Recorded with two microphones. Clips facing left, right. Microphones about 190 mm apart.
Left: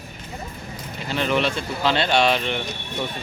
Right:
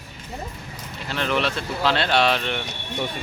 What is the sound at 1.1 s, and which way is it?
Speech, centre (ahead or behind).